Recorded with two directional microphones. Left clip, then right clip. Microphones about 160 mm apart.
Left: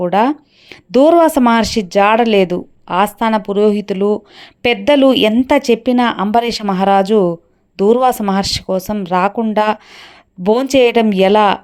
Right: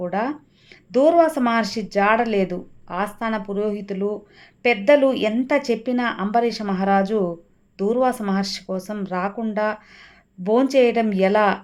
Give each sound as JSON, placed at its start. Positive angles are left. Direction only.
{"t": 0.0, "sound": "speech", "side_deg": 45}